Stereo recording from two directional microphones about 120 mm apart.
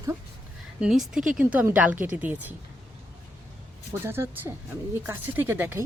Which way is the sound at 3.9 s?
20° right (ahead or behind).